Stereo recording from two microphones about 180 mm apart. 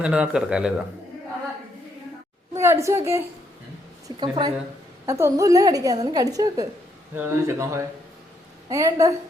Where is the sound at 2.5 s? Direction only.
15° right (ahead or behind).